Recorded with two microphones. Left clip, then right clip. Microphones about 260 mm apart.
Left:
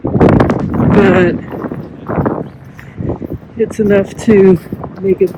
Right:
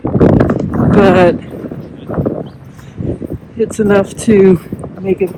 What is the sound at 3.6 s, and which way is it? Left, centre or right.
A woman's voice, centre.